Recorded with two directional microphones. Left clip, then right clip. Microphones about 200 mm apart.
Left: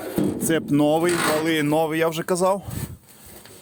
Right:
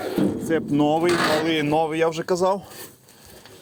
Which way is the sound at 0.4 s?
35° left (ahead or behind).